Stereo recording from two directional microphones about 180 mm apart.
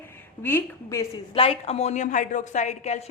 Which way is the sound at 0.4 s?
15° left (ahead or behind).